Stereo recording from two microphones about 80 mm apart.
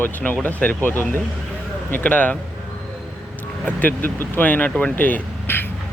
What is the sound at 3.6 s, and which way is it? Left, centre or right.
Speech, left.